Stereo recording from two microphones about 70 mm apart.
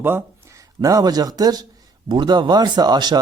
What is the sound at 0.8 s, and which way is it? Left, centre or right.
Speech, right.